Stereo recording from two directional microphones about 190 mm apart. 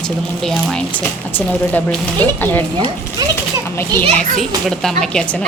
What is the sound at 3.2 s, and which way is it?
Speech, 20° right (ahead or behind).